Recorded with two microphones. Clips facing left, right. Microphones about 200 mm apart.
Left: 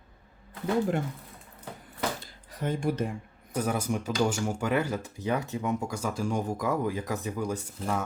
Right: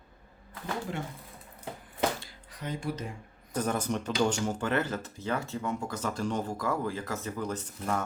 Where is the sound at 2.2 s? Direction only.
50° left (ahead or behind).